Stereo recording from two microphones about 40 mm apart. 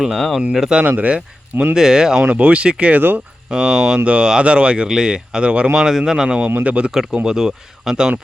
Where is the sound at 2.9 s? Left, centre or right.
Right.